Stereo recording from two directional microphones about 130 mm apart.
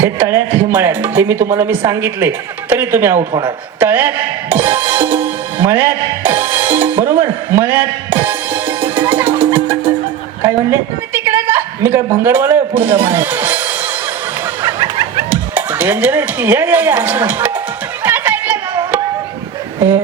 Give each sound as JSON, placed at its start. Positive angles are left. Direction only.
{"t": 0.0, "sound": "speech", "side_deg": -20}
{"t": 3.8, "sound": "music", "side_deg": -15}
{"t": 11.1, "sound": "a man's voice", "side_deg": -15}
{"t": 14.6, "sound": "music", "side_deg": -25}
{"t": 15.5, "sound": "speech", "side_deg": -15}
{"t": 18.0, "sound": "a sound", "side_deg": -15}